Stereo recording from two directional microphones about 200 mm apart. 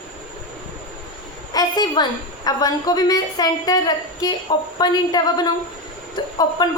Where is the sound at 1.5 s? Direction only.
20° left (ahead or behind).